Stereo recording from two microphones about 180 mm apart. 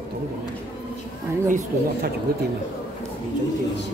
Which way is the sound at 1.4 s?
45° right (ahead or behind).